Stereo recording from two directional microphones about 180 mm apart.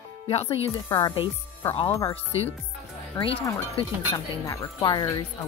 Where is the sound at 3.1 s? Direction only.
30° left (ahead or behind).